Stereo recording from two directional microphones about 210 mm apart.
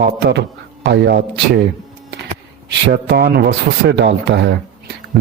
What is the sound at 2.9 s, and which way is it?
Speech, 50° right (ahead or behind).